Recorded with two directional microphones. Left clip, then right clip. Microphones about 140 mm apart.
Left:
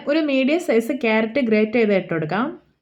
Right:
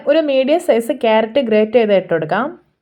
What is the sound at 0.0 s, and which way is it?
Speech, 25° right (ahead or behind).